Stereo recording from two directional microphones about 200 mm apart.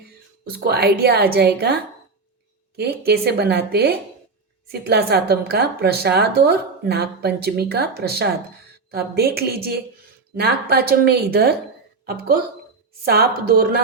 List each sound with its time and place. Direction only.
0.5 s a woman's voice: 50° right (ahead or behind)
13.1 s a woman's voice: 50° right (ahead or behind)